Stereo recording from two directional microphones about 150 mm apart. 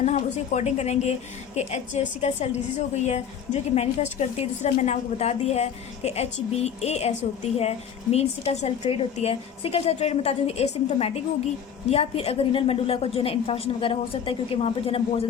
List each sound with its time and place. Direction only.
0.0 s a woman's voice: 50° left (ahead or behind)